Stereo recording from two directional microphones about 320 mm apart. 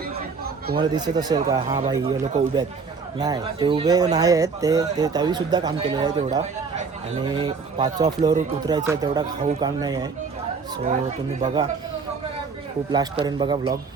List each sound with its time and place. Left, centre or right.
0.8 s speech: centre
11.3 s speech: right
12.9 s speech: centre